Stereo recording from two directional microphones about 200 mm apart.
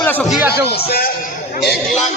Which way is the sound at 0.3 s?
10° right (ahead or behind).